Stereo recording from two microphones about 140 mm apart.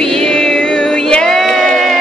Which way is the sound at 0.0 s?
5° left (ahead or behind).